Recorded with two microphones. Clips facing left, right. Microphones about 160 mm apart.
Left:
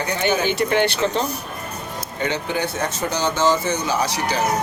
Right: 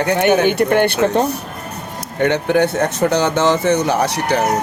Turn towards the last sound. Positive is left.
turn(degrees=-65)  # may be behind; listen again after turning